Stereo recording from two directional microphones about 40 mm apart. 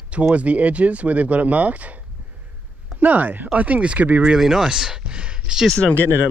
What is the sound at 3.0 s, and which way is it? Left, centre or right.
Speech, right.